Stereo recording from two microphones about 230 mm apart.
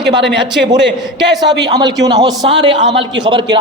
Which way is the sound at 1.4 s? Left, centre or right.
Centre.